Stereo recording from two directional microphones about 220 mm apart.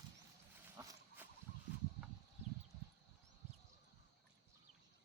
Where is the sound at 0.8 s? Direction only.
15° right (ahead or behind).